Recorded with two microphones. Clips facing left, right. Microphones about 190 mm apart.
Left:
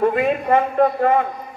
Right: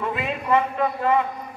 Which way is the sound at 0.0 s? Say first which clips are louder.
Left 9 dB; 50° left (ahead or behind).